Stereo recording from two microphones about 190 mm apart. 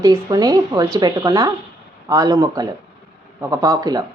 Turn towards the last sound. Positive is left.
turn(degrees=-20)  # may be behind; listen again after turning